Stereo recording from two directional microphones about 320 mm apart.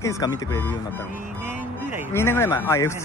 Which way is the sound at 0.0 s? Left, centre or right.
Centre.